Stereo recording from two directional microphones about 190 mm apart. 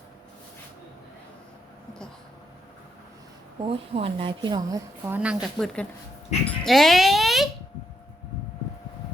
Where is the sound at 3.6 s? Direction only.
30° right (ahead or behind).